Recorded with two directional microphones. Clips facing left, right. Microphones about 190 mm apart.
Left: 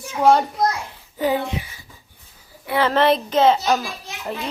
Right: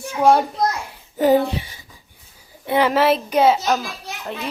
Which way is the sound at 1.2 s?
40° right (ahead or behind).